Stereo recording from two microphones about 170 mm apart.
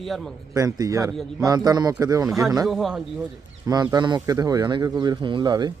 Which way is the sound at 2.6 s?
Centre (ahead or behind).